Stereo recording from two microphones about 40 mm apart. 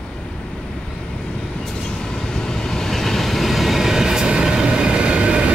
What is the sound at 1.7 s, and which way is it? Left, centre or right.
Train, centre.